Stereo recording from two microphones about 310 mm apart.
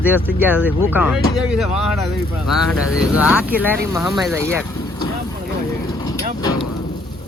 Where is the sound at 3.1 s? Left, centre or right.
Centre.